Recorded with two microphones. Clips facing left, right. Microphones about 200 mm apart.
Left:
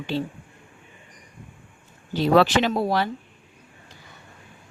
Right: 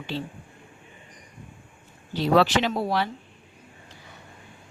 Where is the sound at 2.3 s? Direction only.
50° left (ahead or behind).